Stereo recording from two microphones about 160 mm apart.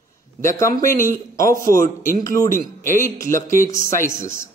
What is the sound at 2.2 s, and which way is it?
A man's voice, 20° left (ahead or behind).